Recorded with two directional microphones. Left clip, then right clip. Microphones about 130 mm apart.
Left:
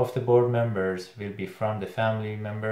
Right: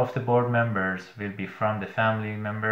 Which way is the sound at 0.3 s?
45° left (ahead or behind).